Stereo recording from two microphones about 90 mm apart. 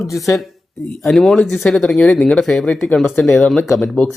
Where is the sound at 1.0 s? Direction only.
5° left (ahead or behind).